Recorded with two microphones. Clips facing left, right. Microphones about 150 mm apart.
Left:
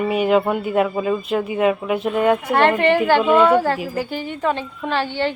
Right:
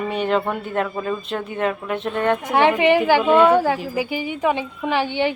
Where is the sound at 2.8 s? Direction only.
10° right (ahead or behind).